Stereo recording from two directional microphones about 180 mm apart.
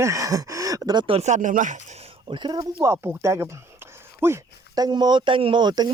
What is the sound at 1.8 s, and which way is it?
Speech, 35° right (ahead or behind).